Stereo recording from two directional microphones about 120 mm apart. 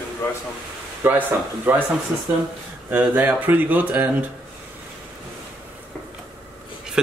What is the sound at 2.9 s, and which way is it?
Speech, 15° right (ahead or behind).